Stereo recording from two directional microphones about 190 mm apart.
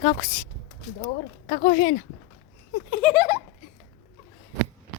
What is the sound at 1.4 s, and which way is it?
Speech, 40° left (ahead or behind).